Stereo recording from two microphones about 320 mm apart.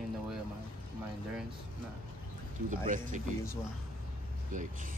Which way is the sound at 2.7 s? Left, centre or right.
Right.